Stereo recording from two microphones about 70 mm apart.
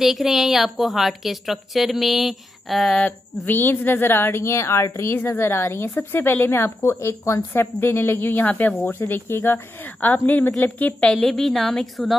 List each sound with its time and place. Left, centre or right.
0.0 s a woman's voice: centre
3.0 s speech: left
7.3 s speech: left
11.1 s a woman's voice: centre